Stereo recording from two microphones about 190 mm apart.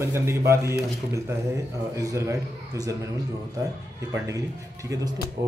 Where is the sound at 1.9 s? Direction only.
15° right (ahead or behind).